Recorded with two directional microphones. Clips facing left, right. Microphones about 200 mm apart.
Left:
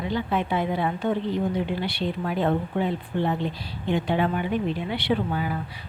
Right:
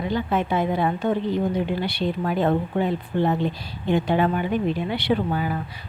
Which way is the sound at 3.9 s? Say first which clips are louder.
Right 3 dB; 45° right (ahead or behind).